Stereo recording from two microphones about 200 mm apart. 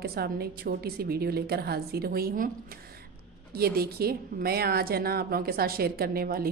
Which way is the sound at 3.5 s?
50° right (ahead or behind).